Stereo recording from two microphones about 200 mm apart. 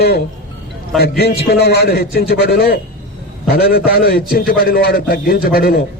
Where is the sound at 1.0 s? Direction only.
55° left (ahead or behind).